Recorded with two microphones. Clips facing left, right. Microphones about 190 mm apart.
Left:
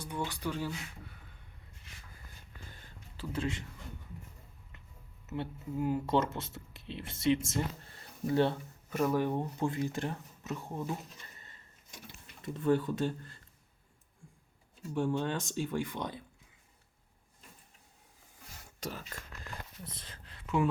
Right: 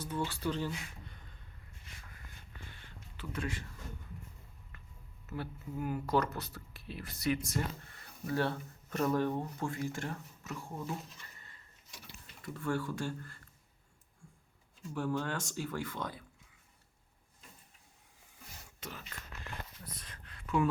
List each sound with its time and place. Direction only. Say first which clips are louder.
0.0 s speech: right 1 dB; 15° left (ahead or behind)
2.7 s a sound: left 1 dB; 35° left (ahead or behind)
4.7 s a sound: even; 20° left (ahead or behind)
5.2 s speech: left 3 dB; 20° left (ahead or behind)
8.9 s speech: left 1 dB; 10° left (ahead or behind)
11.2 s a sound: left 2 dB; 25° left (ahead or behind)
12.4 s speech: left 6 dB; 20° left (ahead or behind)
14.9 s speech: left 3 dB; 20° left (ahead or behind)
18.8 s speech: left 6 dB; 40° left (ahead or behind)
19.8 s speech: left 2 dB; 25° left (ahead or behind)